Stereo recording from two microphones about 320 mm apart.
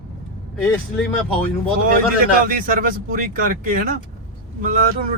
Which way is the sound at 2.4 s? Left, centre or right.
Right.